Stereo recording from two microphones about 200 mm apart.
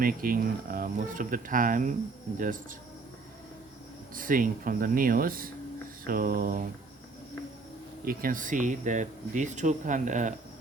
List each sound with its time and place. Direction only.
0.0 s speech: 45° right (ahead or behind)
4.1 s speech: 45° right (ahead or behind)
8.0 s speech: 45° right (ahead or behind)